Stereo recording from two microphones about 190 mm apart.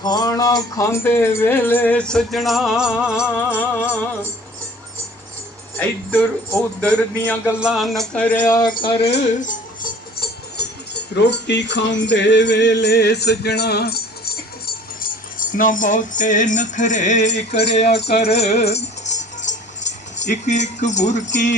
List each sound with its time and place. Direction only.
0.0 s speech: 20° left (ahead or behind); by 3.6 s 5° right (ahead or behind)
6.1 s speech: 5° left (ahead or behind)
7.4 s speech: 5° right (ahead or behind); by 9.6 s 40° left (ahead or behind)
10.2 s speech: 60° left (ahead or behind)
15.0 s speech: 45° left (ahead or behind)
17.9 s music: 60° left (ahead or behind)
18.2 s music: 35° left (ahead or behind)